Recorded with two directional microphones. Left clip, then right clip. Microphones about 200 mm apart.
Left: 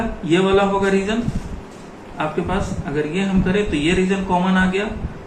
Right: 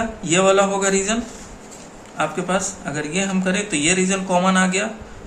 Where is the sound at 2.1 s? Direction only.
70° right (ahead or behind).